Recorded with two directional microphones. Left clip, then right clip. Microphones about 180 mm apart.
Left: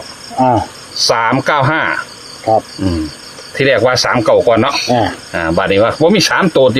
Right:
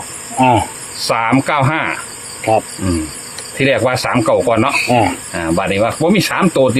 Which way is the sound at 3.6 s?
65° left (ahead or behind).